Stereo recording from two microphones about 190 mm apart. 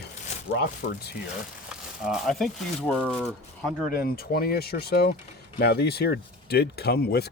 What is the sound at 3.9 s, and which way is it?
Speech, 50° left (ahead or behind).